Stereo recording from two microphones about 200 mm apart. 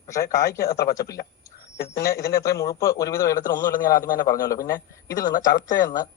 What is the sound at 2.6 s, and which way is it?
A man's voice, 15° left (ahead or behind).